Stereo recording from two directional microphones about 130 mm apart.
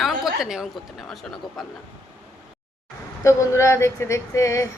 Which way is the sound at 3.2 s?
20° left (ahead or behind).